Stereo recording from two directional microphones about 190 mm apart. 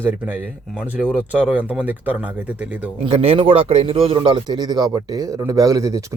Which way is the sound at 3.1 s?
30° right (ahead or behind).